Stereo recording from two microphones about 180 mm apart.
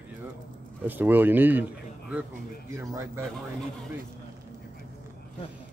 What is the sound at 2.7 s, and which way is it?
Speech, 15° right (ahead or behind).